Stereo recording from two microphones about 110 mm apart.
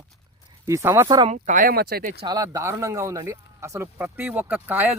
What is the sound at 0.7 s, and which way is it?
Speech, 25° right (ahead or behind).